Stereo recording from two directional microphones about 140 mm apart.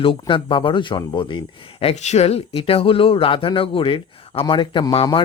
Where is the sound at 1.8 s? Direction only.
55° left (ahead or behind); by 5.2 s 40° left (ahead or behind).